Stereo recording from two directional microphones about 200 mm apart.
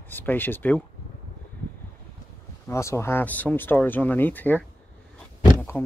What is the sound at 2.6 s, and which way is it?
Speech, 15° left (ahead or behind).